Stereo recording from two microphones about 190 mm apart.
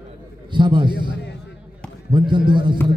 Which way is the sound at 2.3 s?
25° right (ahead or behind).